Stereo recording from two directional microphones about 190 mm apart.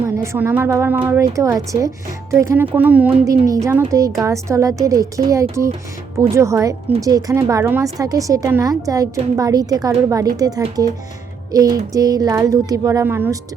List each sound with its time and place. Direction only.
0.2 s a woman's voice: 10° right (ahead or behind)